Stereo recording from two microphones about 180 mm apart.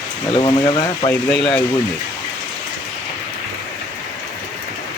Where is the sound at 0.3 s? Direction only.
25° left (ahead or behind).